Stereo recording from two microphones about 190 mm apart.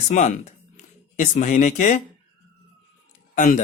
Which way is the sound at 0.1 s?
40° left (ahead or behind).